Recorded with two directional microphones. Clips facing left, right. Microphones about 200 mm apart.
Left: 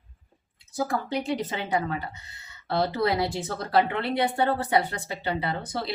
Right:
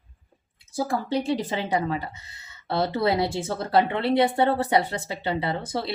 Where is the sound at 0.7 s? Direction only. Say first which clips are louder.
Right 2 dB; 25° right (ahead or behind).